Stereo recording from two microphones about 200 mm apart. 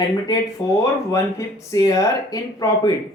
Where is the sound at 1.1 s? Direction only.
15° left (ahead or behind).